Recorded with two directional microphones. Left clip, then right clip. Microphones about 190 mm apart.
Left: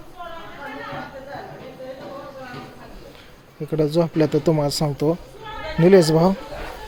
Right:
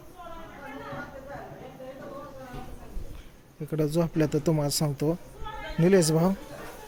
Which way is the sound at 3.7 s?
5° left (ahead or behind).